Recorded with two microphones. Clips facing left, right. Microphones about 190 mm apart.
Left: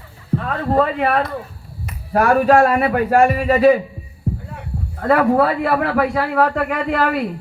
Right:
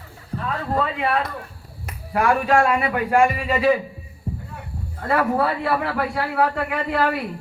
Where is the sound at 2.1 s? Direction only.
40° left (ahead or behind).